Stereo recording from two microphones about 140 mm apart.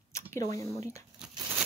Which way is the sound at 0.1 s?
20° left (ahead or behind).